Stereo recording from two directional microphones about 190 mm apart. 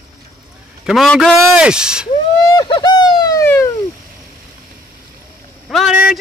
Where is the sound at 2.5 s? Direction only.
25° left (ahead or behind).